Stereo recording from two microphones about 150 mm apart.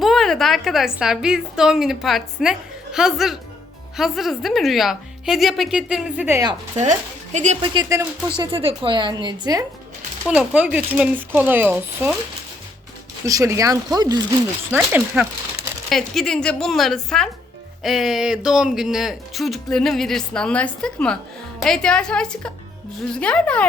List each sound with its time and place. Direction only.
0.0 s a woman's voice: centre (ahead or behind)
7.3 s speech: 50° right (ahead or behind)
7.6 s a woman's voice: 30° right (ahead or behind)
8.4 s a woman's voice: 35° right (ahead or behind)
10.2 s speech: 10° right (ahead or behind)
13.2 s speech: 20° right (ahead or behind)
14.8 s speech: 10° right (ahead or behind)
15.9 s speech: 5° left (ahead or behind)